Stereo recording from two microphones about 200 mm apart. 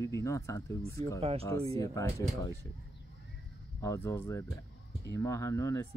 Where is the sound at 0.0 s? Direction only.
15° left (ahead or behind).